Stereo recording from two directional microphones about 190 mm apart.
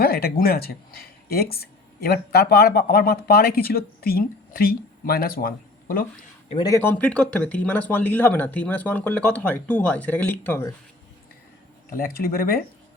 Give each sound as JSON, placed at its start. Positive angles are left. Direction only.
{"t": 0.0, "sound": "speech", "side_deg": 55}
{"t": 6.5, "sound": "speech", "side_deg": 20}
{"t": 11.9, "sound": "speech", "side_deg": 50}